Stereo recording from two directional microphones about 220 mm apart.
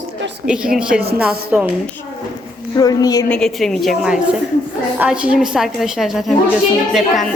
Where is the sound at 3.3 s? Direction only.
5° left (ahead or behind).